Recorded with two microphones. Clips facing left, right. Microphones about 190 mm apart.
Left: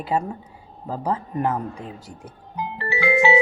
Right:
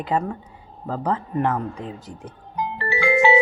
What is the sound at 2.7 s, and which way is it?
Music, 5° left (ahead or behind).